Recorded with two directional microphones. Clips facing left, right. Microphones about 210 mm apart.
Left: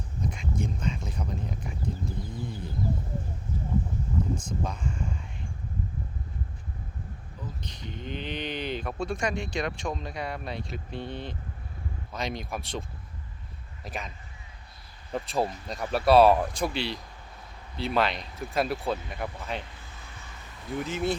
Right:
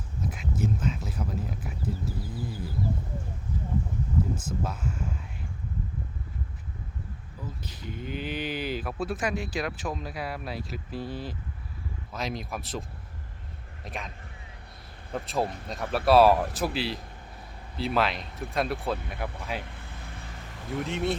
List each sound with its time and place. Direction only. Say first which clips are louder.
0.2 s a sound: right 1 dB; 5° right (ahead or behind)
4.4 s a sound: even; 5° right (ahead or behind)
7.6 s speech: right 2 dB; 5° right (ahead or behind)
13.8 s speech: left 1 dB; centre (ahead or behind)
15.1 s speech: left 1 dB; centre (ahead or behind)
19.7 s vehicle: right 4 dB; 55° right (ahead or behind)
20.7 s speech: even; centre (ahead or behind)